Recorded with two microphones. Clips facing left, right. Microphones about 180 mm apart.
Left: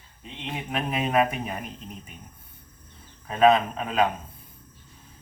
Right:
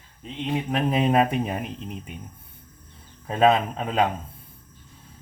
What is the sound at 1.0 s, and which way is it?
Speech, 30° right (ahead or behind).